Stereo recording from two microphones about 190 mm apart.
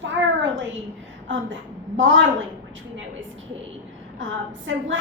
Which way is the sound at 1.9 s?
80° right.